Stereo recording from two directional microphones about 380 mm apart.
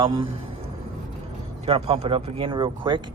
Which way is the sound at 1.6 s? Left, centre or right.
Centre.